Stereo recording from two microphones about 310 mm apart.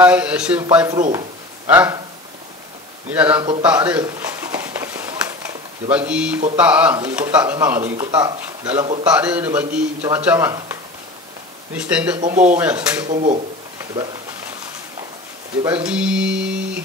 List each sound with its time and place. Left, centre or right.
0.0 s speech: centre
3.1 s speech: centre
3.6 s a sound: centre
5.9 s speech: centre
9.0 s speech: centre
13.1 s speech: right
15.6 s a sound: centre